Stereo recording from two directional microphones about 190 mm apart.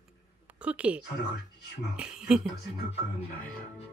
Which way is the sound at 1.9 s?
5° right (ahead or behind).